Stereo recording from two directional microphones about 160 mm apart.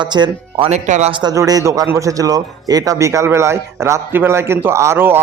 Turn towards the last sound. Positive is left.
turn(degrees=-15)  # may be behind; listen again after turning